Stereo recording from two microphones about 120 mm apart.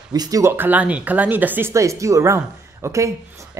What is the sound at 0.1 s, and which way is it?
Speech, 30° right (ahead or behind).